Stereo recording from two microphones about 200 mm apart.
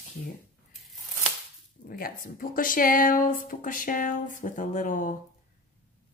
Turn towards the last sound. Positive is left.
turn(degrees=40)  # may be behind; listen again after turning